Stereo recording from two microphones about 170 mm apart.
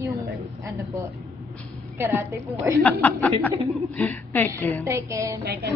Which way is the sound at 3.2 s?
10° left (ahead or behind).